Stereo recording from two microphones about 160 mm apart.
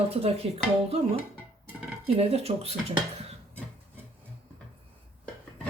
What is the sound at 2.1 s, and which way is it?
Speech, 40° right (ahead or behind).